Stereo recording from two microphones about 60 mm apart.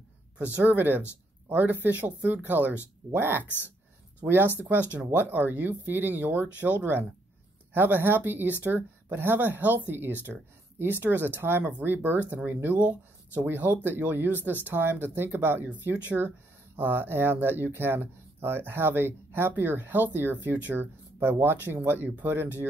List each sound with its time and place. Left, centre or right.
0.6 s speech: right